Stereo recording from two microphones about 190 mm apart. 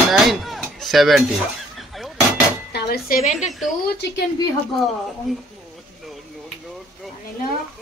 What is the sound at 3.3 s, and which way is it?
Speech, centre (ahead or behind).